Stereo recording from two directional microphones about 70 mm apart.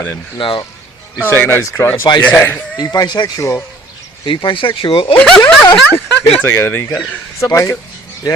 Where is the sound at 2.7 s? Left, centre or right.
Left.